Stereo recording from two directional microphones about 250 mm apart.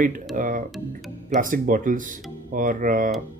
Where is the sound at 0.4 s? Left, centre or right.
Right.